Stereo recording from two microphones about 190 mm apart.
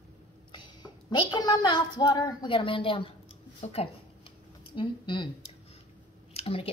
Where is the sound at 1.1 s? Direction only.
20° left (ahead or behind).